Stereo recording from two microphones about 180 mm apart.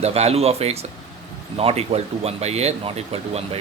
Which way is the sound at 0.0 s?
35° right (ahead or behind).